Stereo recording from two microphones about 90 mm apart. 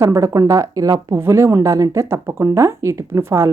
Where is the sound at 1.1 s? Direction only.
30° right (ahead or behind).